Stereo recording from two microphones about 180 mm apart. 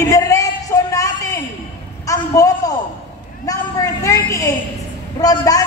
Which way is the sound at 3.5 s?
20° left (ahead or behind).